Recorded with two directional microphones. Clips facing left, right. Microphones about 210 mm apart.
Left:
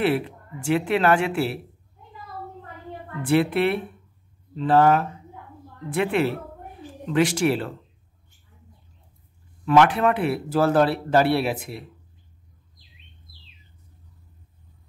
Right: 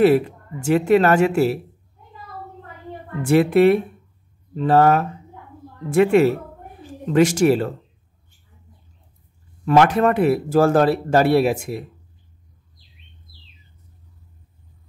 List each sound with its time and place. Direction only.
0.0 s speech: 45° right (ahead or behind)
3.2 s speech: 45° right (ahead or behind)
9.7 s speech: 45° right (ahead or behind)